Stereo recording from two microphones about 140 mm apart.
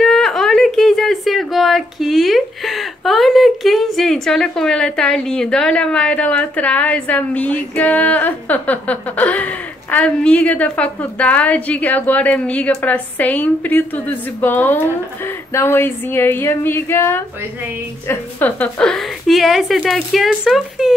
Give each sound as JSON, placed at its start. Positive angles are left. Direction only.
{"t": 0.0, "sound": "speech", "side_deg": 5}